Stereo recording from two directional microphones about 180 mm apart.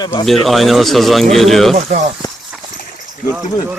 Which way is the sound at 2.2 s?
20° left (ahead or behind).